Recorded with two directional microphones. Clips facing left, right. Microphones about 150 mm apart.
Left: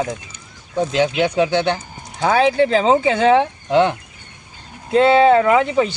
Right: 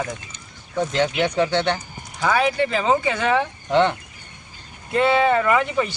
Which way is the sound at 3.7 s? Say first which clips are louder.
Left 3 dB; 10° left (ahead or behind).